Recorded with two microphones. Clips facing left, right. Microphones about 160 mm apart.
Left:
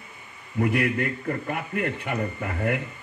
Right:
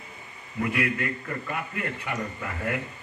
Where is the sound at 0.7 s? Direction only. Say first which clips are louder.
Left 3 dB; 55° left (ahead or behind).